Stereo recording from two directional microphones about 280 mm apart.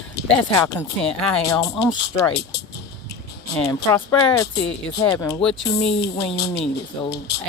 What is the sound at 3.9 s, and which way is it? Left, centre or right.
Speech, centre.